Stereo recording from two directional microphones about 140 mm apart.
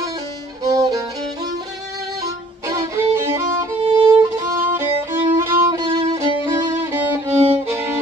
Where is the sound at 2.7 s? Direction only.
20° right (ahead or behind).